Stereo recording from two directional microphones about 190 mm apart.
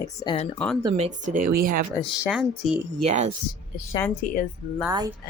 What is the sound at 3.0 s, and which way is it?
Speech, 35° right (ahead or behind).